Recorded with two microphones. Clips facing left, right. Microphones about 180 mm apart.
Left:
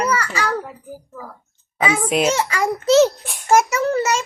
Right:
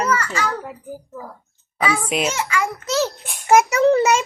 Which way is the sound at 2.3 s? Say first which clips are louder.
Left 3 dB; 35° left (ahead or behind).